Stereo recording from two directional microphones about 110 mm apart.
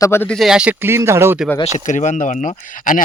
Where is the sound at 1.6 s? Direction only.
90° left.